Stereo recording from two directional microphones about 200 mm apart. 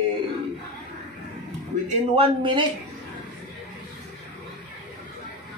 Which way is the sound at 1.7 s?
40° right (ahead or behind).